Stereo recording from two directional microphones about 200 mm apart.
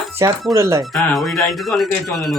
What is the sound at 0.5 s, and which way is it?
Speech, 15° right (ahead or behind).